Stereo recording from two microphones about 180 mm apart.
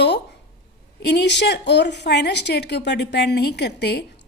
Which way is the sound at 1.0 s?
70° left (ahead or behind).